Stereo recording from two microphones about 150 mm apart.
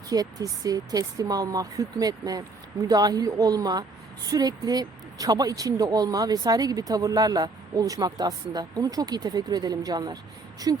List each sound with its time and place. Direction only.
0.1 s speech: 25° right (ahead or behind)